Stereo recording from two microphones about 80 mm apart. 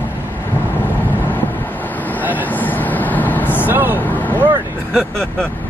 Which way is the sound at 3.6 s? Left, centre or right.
Right.